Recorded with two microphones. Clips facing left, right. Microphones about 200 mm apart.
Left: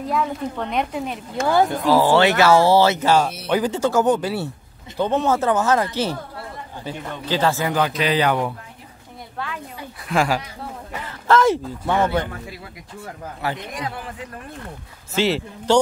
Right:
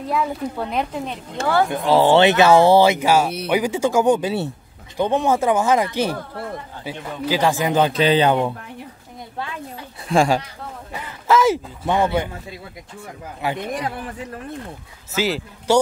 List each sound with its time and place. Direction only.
0.0 s speech: 5° right (ahead or behind)
1.7 s speech: 25° right (ahead or behind)
10.0 s speech: 25° right (ahead or behind)
10.9 s a sound: 5° right (ahead or behind)
11.8 s speech: 15° right (ahead or behind)
13.4 s speech: 20° right (ahead or behind)
15.1 s speech: 5° right (ahead or behind)